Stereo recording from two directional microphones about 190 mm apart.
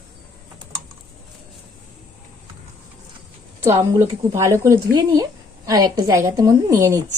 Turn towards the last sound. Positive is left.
turn(degrees=-15)  # may be behind; listen again after turning